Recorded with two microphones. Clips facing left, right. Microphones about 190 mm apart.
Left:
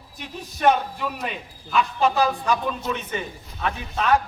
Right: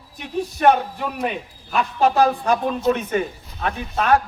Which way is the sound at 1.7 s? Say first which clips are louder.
Right 2 dB; 50° right (ahead or behind).